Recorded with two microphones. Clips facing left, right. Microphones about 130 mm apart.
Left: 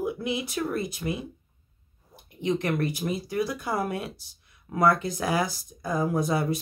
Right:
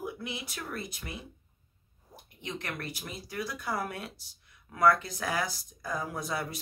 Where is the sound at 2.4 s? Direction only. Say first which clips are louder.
Left 12 dB; 15° left (ahead or behind).